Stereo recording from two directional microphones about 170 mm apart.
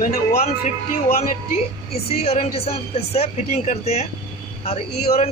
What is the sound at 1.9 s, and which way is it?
Speech, 35° left (ahead or behind).